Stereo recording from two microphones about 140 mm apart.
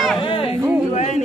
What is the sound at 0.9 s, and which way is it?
Speech, 55° left (ahead or behind).